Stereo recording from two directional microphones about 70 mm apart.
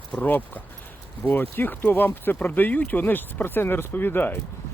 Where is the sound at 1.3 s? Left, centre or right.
Left.